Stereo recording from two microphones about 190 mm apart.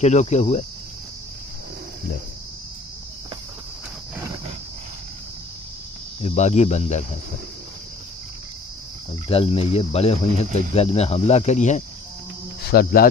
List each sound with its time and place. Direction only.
0.0 s speech: 35° left (ahead or behind)
6.2 s speech: 35° left (ahead or behind)
9.3 s speech: 30° left (ahead or behind)
12.6 s speech: 50° left (ahead or behind)